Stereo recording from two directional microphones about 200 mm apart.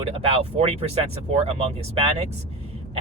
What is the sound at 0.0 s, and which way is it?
Speech, 30° right (ahead or behind).